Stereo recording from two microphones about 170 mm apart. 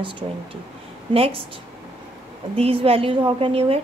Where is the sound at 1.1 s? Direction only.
35° right (ahead or behind).